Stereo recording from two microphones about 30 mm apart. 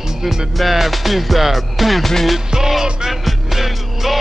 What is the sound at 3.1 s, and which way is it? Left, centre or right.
Music, centre.